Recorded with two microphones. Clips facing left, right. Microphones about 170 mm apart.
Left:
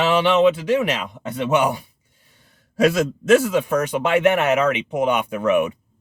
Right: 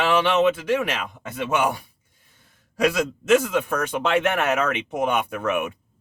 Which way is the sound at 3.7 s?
15° left (ahead or behind).